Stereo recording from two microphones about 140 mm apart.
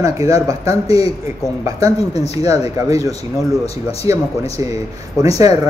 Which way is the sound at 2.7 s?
20° right (ahead or behind).